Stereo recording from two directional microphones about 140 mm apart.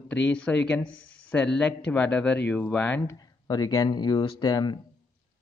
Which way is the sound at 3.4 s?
30° left (ahead or behind).